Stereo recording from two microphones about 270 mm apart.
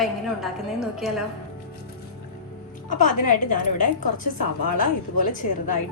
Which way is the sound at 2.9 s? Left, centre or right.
Left.